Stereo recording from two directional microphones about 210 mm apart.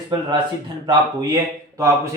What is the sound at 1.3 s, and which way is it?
Speech, 15° right (ahead or behind).